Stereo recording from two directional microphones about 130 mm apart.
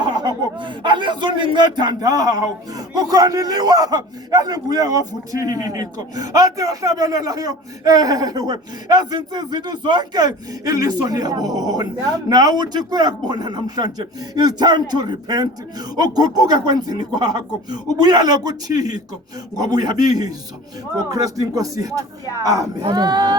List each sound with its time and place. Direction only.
0.0 s a man's voice: 35° right (ahead or behind)